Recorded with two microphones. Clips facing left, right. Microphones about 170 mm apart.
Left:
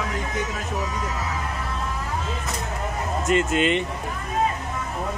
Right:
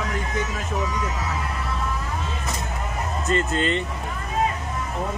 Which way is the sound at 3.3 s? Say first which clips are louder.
Left 2 dB; 15° left (ahead or behind).